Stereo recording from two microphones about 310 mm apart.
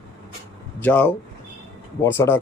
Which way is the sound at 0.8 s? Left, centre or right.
Centre.